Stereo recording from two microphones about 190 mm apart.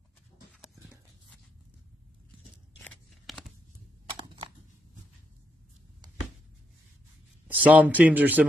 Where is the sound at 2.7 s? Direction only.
5° left (ahead or behind).